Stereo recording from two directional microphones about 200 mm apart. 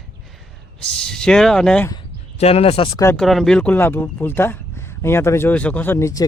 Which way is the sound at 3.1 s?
Centre (ahead or behind).